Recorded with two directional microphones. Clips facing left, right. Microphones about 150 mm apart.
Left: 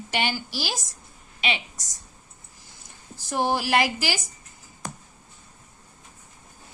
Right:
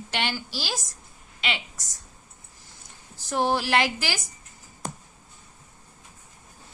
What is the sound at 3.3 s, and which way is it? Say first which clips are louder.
Speech: even; 5° left (ahead or behind).